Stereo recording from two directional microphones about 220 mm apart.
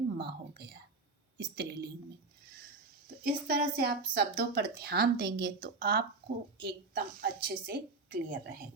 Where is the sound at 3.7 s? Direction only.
45° right (ahead or behind).